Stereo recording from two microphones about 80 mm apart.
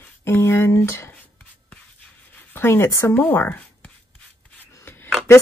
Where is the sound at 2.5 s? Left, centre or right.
Left.